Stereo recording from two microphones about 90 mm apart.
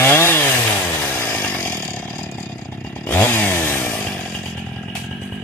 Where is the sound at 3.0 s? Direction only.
20° left (ahead or behind).